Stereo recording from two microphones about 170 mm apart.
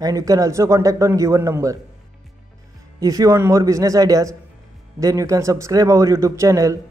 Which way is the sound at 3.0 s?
20° right (ahead or behind).